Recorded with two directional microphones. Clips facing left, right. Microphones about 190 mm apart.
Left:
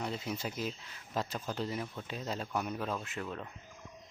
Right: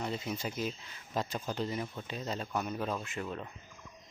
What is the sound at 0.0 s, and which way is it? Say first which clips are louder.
Speech: right 1 dB; centre (ahead or behind).